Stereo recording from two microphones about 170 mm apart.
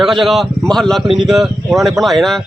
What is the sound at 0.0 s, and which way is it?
Speech, centre (ahead or behind).